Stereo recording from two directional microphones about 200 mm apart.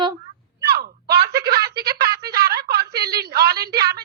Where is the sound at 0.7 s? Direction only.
50° right (ahead or behind).